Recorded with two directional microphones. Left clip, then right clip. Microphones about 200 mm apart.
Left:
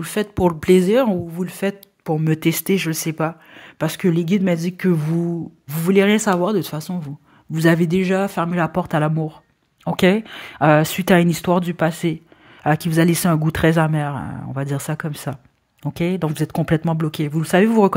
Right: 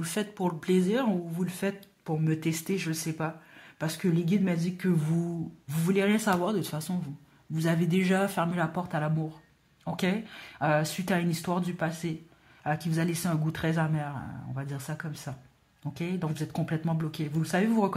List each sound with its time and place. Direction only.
0.0 s speech: 35° left (ahead or behind)